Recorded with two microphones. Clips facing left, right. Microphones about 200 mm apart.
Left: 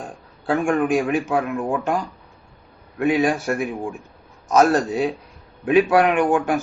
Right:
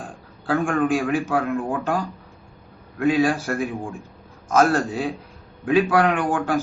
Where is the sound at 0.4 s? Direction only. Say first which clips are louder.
Left 1 dB; 20° left (ahead or behind).